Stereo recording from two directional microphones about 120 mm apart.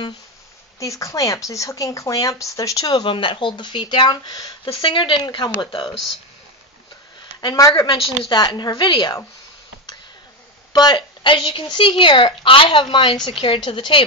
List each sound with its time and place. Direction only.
0.7 s speech: 25° left (ahead or behind)
2.9 s a woman's voice: 45° left (ahead or behind)
7.3 s a woman's voice: 30° left (ahead or behind)
10.7 s a woman's voice: 35° left (ahead or behind)